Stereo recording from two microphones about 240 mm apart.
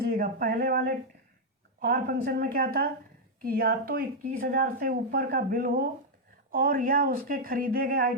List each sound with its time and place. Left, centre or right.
0.0 s speech: right